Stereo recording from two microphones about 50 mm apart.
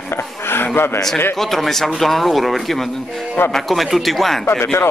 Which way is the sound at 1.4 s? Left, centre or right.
Centre.